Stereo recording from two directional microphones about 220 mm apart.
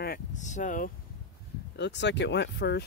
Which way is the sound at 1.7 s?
50° left (ahead or behind).